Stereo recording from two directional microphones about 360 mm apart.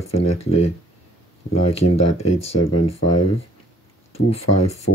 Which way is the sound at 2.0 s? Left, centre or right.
Left.